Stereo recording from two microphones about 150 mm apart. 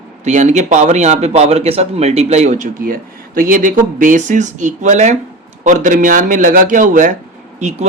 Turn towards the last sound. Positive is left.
turn(degrees=-50)  # may be behind; listen again after turning